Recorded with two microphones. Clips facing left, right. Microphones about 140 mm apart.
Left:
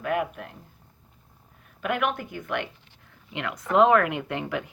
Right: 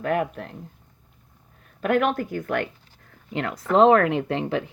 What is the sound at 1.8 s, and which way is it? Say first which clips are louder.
Speech: right 5 dB; 40° right (ahead or behind).